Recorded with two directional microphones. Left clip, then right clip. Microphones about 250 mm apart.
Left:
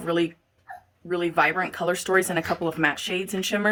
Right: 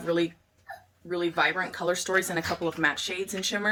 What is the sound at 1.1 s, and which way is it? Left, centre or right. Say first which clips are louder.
Speech: left 4 dB; left.